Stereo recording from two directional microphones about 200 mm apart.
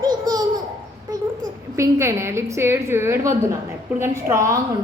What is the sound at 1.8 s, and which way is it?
A woman's voice, 15° right (ahead or behind).